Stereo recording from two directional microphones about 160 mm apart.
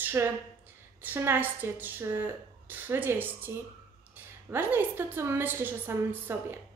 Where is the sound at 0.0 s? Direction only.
15° right (ahead or behind).